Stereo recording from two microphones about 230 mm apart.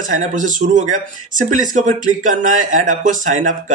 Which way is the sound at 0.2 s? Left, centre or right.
Right.